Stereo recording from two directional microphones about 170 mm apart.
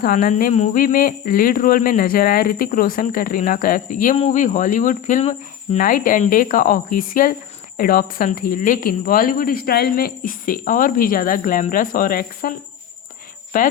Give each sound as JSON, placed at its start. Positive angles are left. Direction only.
{"t": 0.0, "sound": "speech", "side_deg": 50}